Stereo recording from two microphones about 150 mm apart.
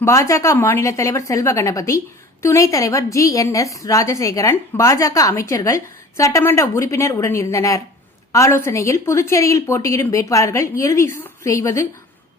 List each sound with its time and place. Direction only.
0.0 s a woman's voice: 20° left (ahead or behind)